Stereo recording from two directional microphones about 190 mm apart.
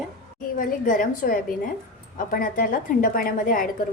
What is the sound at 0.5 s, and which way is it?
A woman's voice, 45° left (ahead or behind).